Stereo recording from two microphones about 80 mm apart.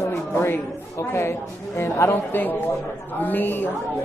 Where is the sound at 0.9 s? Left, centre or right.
Left.